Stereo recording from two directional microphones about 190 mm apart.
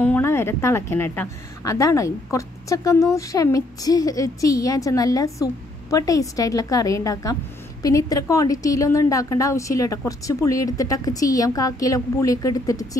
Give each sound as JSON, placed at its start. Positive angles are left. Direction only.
{"t": 0.0, "sound": "a woman's voice", "side_deg": 10}